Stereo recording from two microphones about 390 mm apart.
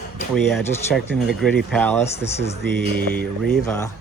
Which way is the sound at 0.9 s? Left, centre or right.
Centre.